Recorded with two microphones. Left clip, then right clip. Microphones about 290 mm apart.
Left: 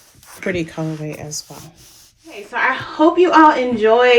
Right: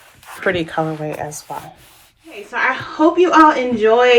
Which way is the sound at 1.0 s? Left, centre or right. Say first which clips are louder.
Right 6 dB; centre.